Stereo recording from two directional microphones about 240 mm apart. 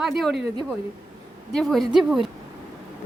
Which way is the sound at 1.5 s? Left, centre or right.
Centre.